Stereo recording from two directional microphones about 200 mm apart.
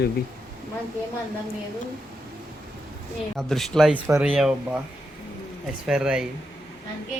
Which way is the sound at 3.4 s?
Centre (ahead or behind).